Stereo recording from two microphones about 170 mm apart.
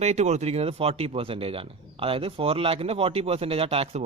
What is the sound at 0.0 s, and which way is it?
Speech, 40° right (ahead or behind).